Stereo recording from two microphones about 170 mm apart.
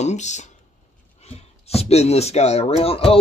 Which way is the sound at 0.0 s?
45° left (ahead or behind).